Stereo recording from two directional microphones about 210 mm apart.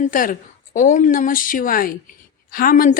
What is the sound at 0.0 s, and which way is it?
Speech, 40° left (ahead or behind).